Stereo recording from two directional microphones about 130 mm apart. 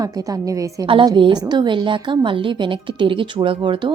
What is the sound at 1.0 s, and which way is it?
A woman's voice, 35° right (ahead or behind).